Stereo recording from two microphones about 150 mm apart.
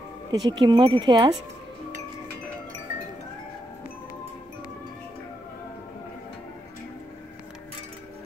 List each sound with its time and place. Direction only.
0.3 s speech: 30° right (ahead or behind)